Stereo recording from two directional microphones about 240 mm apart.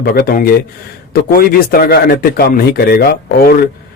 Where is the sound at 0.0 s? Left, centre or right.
Left.